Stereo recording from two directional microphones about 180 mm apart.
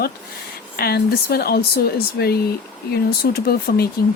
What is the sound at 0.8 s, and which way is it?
Speech, 60° left (ahead or behind).